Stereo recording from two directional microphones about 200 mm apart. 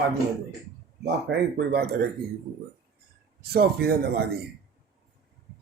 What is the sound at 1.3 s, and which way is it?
Speech, 65° right (ahead or behind).